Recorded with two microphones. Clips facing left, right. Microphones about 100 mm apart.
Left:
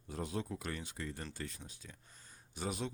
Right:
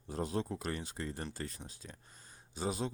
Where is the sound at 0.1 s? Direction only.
35° right (ahead or behind).